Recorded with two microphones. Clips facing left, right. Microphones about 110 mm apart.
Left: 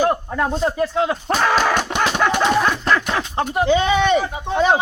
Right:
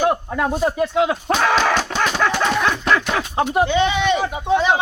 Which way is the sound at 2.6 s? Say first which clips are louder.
Even; 5° right (ahead or behind).